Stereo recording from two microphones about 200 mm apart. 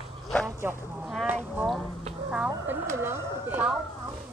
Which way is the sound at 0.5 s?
10° right (ahead or behind).